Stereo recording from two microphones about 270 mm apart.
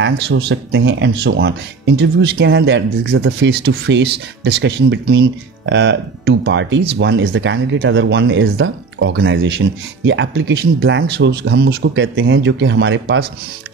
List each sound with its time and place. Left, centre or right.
0.0 s speech: right